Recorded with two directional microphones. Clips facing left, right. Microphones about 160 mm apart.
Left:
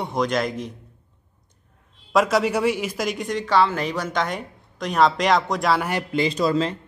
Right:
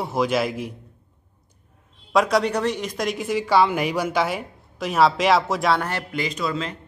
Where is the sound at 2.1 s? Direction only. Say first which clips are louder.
Even; centre (ahead or behind).